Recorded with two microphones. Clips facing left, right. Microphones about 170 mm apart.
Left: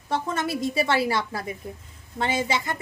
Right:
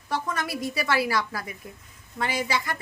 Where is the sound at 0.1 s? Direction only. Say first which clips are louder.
Left 3 dB; 25° left (ahead or behind).